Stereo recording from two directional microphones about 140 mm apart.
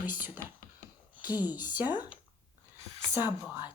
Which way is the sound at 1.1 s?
10° right (ahead or behind).